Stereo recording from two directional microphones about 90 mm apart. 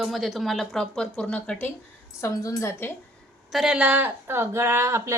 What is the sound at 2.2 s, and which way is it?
Speech, 35° left (ahead or behind).